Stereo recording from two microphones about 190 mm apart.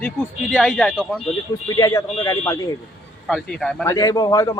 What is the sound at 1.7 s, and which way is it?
Speech, 20° left (ahead or behind).